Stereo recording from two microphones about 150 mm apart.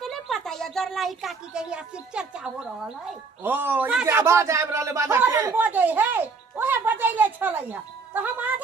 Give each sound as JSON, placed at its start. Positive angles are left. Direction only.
{"t": 0.0, "sound": "speech", "side_deg": 0}